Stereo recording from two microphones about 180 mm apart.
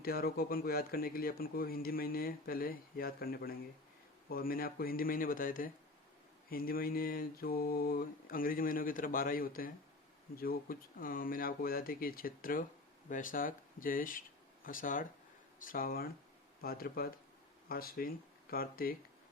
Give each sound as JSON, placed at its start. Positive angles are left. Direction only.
{"t": 0.0, "sound": "speech", "side_deg": 55}
{"t": 4.3, "sound": "mantra", "side_deg": 55}
{"t": 13.1, "sound": "speech", "side_deg": 45}
{"t": 15.5, "sound": "mantra", "side_deg": 50}
{"t": 16.6, "sound": "speech", "side_deg": 55}
{"t": 17.7, "sound": "mantra", "side_deg": 55}
{"t": 18.5, "sound": "speech", "side_deg": 55}